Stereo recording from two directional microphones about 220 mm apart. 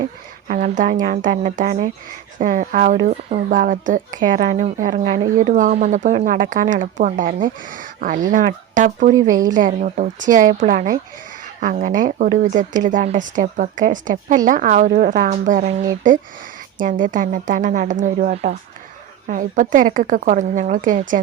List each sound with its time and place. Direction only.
0.4 s a woman's voice: 35° right (ahead or behind)